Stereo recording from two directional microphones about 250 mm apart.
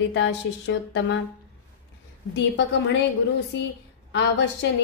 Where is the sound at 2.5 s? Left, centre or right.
Left.